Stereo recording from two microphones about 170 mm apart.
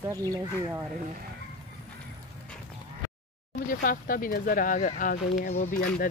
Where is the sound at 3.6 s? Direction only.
55° left (ahead or behind).